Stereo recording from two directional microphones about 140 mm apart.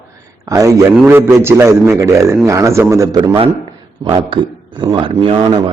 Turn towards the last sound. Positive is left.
turn(degrees=-40)  # may be behind; listen again after turning